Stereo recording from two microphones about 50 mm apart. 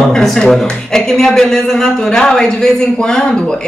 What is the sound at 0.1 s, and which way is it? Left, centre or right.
A man's voice, centre.